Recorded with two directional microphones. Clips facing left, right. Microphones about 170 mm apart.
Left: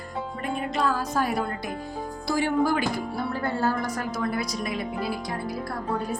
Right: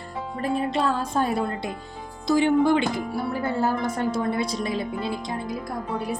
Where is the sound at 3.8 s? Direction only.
25° right (ahead or behind).